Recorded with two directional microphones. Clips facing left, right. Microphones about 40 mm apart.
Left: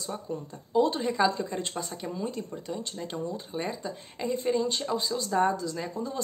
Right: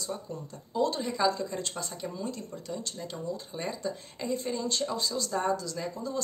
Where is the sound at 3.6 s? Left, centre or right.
Centre.